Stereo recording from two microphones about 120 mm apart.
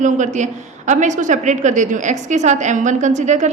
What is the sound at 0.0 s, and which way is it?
A woman's voice, 90° right.